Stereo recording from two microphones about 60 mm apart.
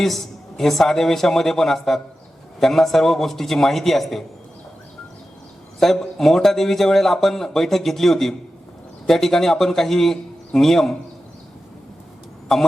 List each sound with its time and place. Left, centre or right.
0.0 s speech: centre
5.8 s speech: centre
12.5 s speech: centre